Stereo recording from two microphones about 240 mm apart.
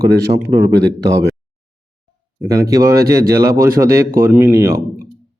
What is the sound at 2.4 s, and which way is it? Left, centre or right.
Speech, centre.